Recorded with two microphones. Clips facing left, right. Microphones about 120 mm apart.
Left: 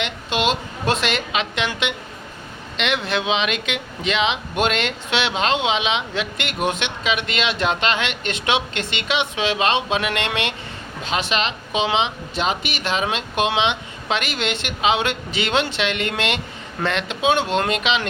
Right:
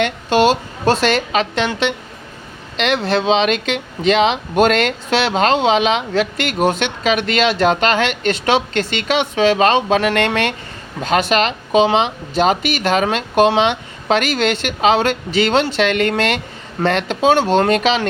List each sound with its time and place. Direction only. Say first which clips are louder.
0.0 s speech: right 8 dB; 40° right (ahead or behind)